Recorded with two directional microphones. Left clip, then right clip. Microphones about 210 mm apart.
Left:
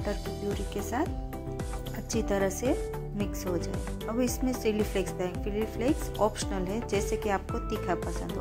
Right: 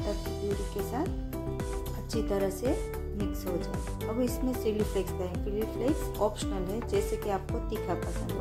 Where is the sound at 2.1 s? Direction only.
25° left (ahead or behind).